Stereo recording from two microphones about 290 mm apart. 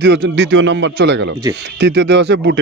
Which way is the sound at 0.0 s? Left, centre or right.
Right.